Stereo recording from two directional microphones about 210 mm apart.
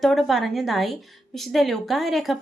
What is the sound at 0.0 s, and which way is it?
A woman's voice, centre (ahead or behind).